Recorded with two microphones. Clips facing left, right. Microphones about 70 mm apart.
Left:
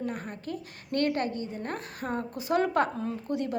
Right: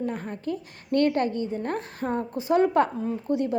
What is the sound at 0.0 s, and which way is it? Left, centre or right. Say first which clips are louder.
A woman's voice: right 5 dB; right.